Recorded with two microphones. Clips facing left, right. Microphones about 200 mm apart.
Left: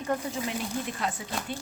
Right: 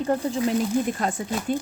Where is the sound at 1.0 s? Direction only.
45° right (ahead or behind).